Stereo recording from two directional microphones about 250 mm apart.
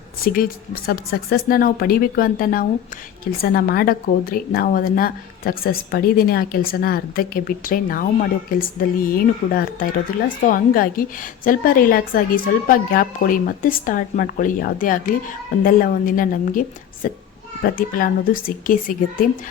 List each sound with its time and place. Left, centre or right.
0.2 s speech: left